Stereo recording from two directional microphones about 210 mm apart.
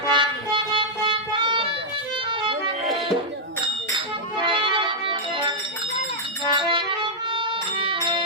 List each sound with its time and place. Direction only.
0.1 s music: 25° right (ahead or behind)
4.4 s music: 25° right (ahead or behind)